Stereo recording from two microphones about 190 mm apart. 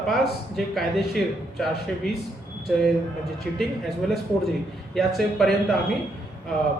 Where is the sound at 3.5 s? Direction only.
5° left (ahead or behind).